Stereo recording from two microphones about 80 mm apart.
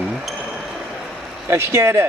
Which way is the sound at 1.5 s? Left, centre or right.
Right.